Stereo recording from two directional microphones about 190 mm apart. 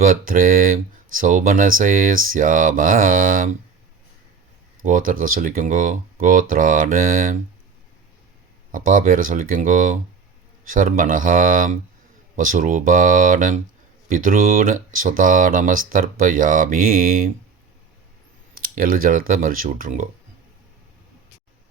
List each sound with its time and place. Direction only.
0.0 s speech: 45° right (ahead or behind)
4.9 s speech: 45° right (ahead or behind)
8.7 s speech: 45° right (ahead or behind)
18.6 s speech: 50° right (ahead or behind)